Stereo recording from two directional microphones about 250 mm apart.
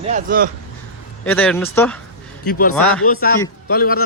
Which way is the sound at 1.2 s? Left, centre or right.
Centre.